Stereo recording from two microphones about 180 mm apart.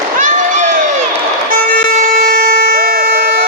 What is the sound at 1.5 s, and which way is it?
Air horn, 50° right (ahead or behind).